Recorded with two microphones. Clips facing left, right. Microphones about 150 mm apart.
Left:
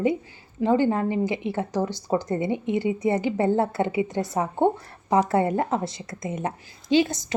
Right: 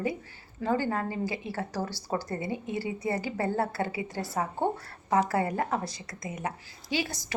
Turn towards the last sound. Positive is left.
turn(degrees=20)  # may be behind; listen again after turning